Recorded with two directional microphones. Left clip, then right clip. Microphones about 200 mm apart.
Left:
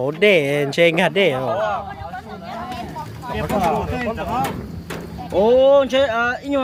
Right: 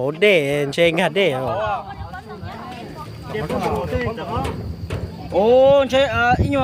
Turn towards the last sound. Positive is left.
turn(degrees=-45)  # may be behind; listen again after turning